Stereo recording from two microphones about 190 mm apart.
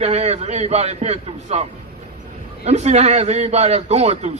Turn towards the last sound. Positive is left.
turn(degrees=-35)  # may be behind; listen again after turning